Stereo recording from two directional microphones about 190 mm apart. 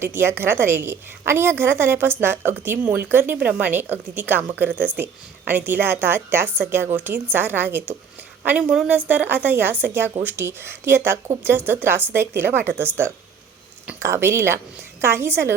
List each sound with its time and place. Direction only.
0.0 s a woman's voice: 10° right (ahead or behind)